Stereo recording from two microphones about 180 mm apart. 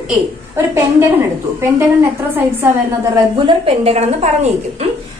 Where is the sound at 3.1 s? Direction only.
30° right (ahead or behind).